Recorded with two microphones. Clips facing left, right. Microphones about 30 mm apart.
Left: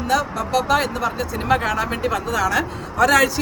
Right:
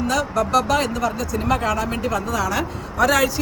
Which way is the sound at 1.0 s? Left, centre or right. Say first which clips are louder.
Even; left.